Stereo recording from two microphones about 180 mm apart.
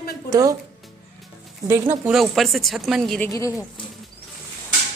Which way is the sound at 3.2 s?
15° left (ahead or behind).